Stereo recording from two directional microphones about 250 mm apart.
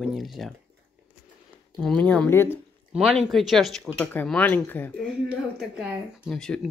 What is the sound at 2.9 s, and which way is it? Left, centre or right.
Speech, centre.